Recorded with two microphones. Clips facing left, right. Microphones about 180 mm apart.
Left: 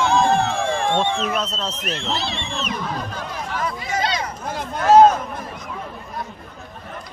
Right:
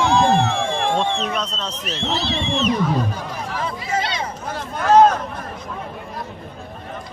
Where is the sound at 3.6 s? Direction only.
25° right (ahead or behind).